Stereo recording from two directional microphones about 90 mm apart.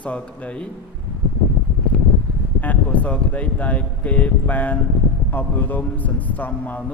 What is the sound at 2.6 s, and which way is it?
Speech, 15° left (ahead or behind).